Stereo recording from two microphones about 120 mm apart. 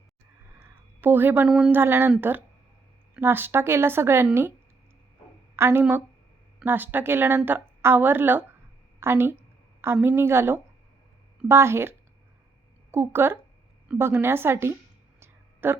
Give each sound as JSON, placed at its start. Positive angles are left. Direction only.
{"t": 0.6, "sound": "a sound", "side_deg": -15}
{"t": 1.5, "sound": "speech", "side_deg": -5}
{"t": 1.7, "sound": "speech", "side_deg": -15}
{"t": 3.2, "sound": "a woman's voice", "side_deg": -15}
{"t": 5.5, "sound": "a woman's voice", "side_deg": -20}
{"t": 15.2, "sound": "a sound", "side_deg": -20}